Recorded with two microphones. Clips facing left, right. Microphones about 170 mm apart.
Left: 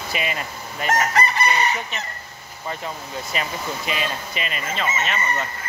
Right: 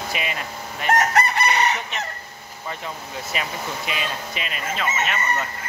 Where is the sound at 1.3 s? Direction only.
70° right (ahead or behind).